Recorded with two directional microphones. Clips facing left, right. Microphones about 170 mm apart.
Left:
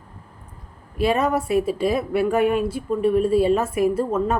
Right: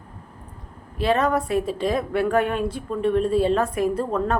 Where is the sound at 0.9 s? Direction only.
10° left (ahead or behind).